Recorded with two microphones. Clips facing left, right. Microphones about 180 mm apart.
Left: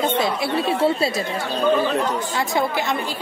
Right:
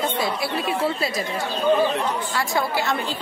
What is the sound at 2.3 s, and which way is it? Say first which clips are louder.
Speech: left 2 dB; 20° left (ahead or behind).